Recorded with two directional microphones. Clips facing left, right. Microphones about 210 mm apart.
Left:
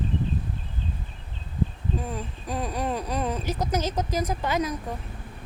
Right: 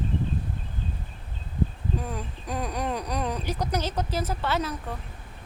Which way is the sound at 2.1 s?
Centre (ahead or behind).